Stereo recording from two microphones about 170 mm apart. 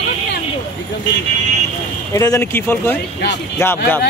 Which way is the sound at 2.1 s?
20° left (ahead or behind).